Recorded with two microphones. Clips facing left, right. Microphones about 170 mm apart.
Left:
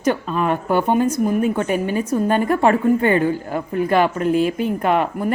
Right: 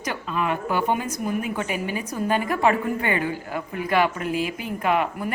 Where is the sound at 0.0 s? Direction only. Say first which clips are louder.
Left 7 dB; 40° left (ahead or behind).